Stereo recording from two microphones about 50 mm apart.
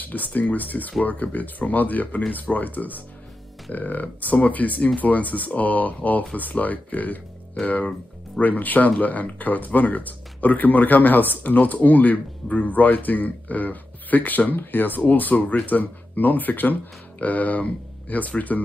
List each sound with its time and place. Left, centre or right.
0.0 s speech: left